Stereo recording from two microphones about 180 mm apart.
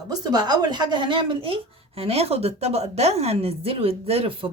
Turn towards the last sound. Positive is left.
turn(degrees=-30)  # may be behind; listen again after turning